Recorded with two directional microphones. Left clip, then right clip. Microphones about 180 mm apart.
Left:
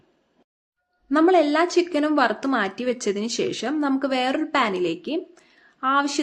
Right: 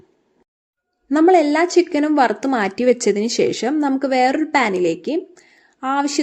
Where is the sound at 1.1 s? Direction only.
20° right (ahead or behind).